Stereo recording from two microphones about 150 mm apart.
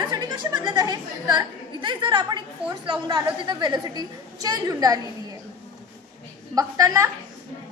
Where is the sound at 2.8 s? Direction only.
30° right (ahead or behind).